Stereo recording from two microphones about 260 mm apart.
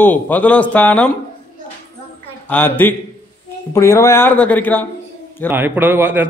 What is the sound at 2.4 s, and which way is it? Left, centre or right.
A man's voice, centre.